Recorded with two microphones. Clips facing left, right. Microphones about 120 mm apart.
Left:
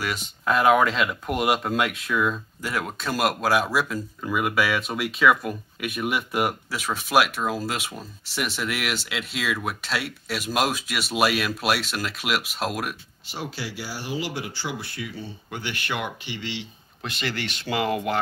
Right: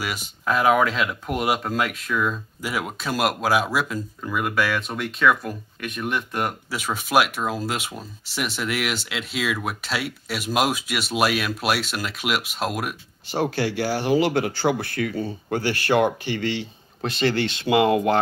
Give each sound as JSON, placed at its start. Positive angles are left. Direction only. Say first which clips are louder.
{"t": 0.0, "sound": "speech", "louder": "even", "side_deg": -5}
{"t": 13.3, "sound": "speech", "louder": "right 10 dB", "side_deg": -50}
{"t": 16.3, "sound": "speech", "louder": "right 7 dB", "side_deg": -45}